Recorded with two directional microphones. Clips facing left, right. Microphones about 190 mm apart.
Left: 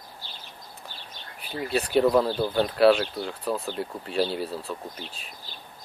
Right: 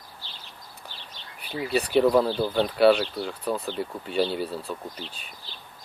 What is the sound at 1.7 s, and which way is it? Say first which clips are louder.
Speech: right 1 dB; centre (ahead or behind).